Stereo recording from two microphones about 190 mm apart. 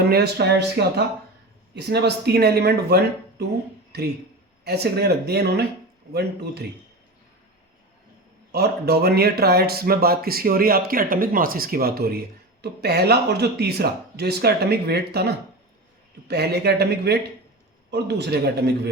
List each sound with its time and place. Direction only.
0.0 s speech: 55° right (ahead or behind)
8.5 s speech: 55° right (ahead or behind)